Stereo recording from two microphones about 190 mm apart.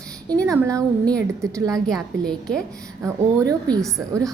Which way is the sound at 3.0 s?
15° right (ahead or behind).